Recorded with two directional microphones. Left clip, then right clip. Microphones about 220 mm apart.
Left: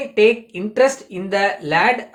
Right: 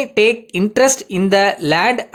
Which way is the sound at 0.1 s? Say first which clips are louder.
Left 2 dB; 50° right (ahead or behind).